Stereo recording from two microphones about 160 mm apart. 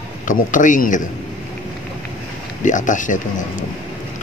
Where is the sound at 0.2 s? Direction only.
55° left (ahead or behind).